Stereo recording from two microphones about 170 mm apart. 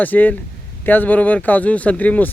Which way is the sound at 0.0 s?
10° left (ahead or behind).